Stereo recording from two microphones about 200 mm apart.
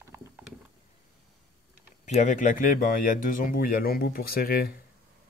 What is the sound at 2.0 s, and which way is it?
Speech, 35° left (ahead or behind).